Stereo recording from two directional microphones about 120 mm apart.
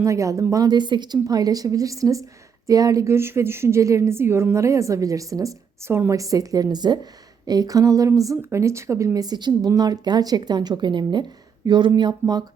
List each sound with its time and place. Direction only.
0.0 s a woman's voice: 25° right (ahead or behind)